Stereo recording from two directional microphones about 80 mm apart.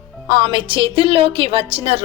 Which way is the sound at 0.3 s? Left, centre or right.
Right.